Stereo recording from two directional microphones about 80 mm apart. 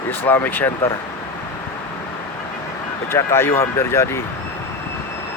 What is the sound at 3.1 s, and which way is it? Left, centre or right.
Speech, left.